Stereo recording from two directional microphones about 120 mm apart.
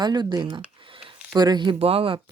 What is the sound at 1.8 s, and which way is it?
Speech, 55° right (ahead or behind).